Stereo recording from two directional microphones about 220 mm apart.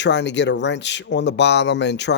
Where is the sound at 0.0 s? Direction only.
55° left (ahead or behind).